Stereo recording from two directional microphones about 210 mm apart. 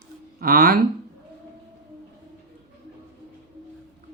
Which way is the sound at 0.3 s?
45° right (ahead or behind).